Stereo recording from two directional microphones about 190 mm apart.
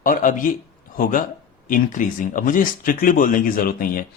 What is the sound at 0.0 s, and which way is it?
Speech, 45° left (ahead or behind).